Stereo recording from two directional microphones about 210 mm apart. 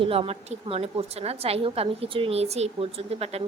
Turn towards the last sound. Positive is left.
turn(degrees=-30)  # may be behind; listen again after turning